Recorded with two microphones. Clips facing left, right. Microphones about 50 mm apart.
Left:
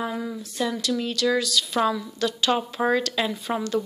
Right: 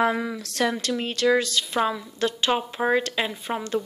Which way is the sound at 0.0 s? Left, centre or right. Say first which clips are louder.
Right 6 dB; right.